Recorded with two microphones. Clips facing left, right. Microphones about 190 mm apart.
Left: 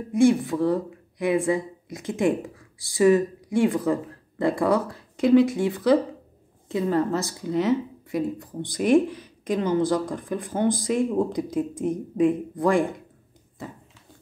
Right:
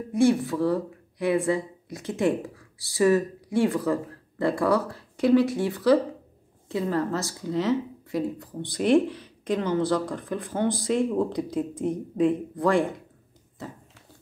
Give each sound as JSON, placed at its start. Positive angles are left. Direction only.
{"t": 0.2, "sound": "speech", "side_deg": 15}